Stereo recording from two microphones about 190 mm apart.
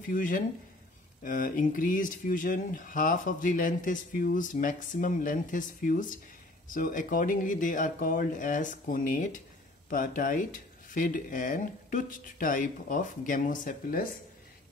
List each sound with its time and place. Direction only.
0.1 s speech: 45° left (ahead or behind)